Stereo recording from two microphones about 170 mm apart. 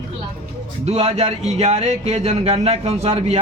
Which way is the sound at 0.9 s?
40° right (ahead or behind).